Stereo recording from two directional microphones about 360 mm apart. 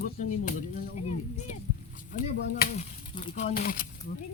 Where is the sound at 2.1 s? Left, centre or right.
Left.